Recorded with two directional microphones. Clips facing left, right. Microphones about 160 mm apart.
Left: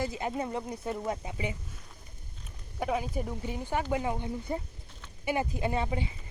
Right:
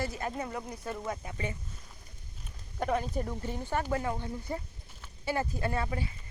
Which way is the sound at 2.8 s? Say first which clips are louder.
Even; 5° left (ahead or behind).